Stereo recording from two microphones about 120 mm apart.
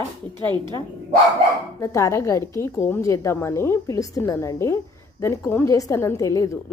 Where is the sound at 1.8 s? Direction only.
25° left (ahead or behind).